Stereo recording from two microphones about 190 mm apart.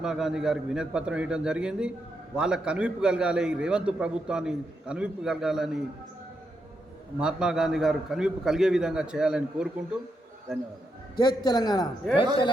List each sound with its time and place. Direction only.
0.0 s a man's voice: centre (ahead or behind)
7.2 s a man's voice: 5° right (ahead or behind)
11.2 s a man's voice: 20° left (ahead or behind)